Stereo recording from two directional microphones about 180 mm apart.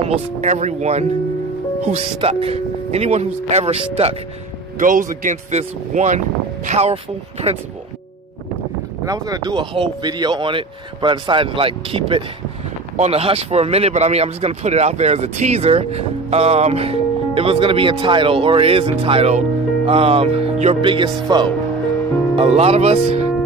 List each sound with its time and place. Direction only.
0.1 s speech: 40° right (ahead or behind)
4.7 s speech: 45° right (ahead or behind)
9.0 s speech: 20° right (ahead or behind); by 23.2 s 35° right (ahead or behind)